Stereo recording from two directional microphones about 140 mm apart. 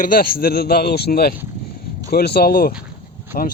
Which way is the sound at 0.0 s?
90° left.